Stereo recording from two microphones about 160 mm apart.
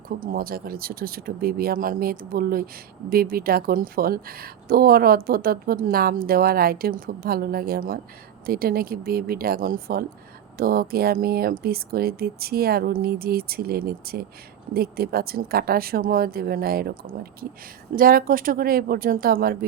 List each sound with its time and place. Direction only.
0.2 s speech: 65° right (ahead or behind)